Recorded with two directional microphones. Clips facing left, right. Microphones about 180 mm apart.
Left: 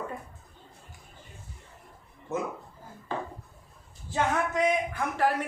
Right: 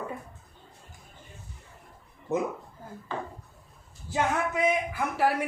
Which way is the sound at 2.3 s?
15° right (ahead or behind).